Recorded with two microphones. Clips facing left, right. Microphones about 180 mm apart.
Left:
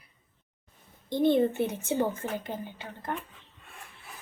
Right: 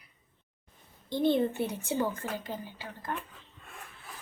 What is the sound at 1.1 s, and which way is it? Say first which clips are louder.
Speech: left 3 dB; 50° left (ahead or behind).